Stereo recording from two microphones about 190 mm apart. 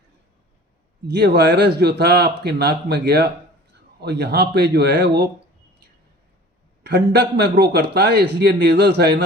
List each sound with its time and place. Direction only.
1.0 s a man's voice: 60° right (ahead or behind)
6.8 s a man's voice: 55° right (ahead or behind)